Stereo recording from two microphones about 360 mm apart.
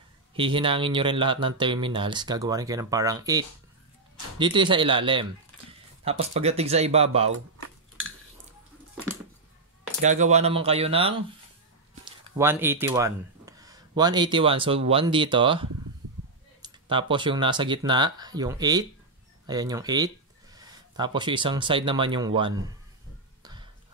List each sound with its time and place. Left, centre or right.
0.3 s speech: centre
10.0 s speech: centre
12.4 s speech: centre
23.4 s a sound: centre